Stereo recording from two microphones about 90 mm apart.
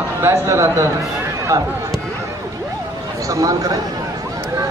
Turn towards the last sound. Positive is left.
turn(degrees=-40)  # may be behind; listen again after turning